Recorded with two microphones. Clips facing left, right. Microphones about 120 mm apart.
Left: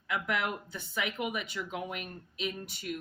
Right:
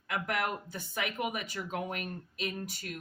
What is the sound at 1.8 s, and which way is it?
Speech, 40° right (ahead or behind).